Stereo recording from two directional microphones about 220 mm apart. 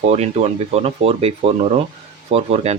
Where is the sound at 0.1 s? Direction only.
30° right (ahead or behind).